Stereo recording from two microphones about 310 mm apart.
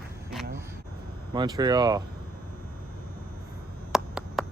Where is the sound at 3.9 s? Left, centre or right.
Centre.